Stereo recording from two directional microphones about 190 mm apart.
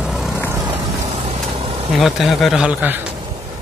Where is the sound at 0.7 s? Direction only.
35° right (ahead or behind).